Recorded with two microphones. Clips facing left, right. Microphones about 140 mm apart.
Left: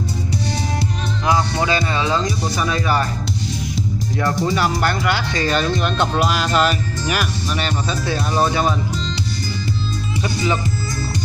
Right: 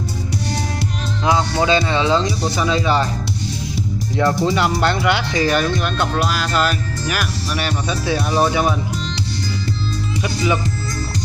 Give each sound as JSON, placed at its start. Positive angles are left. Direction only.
{"t": 1.2, "sound": "music", "side_deg": -20}
{"t": 2.6, "sound": "speech", "side_deg": -20}
{"t": 4.2, "sound": "speech", "side_deg": -10}
{"t": 5.8, "sound": "speech", "side_deg": 0}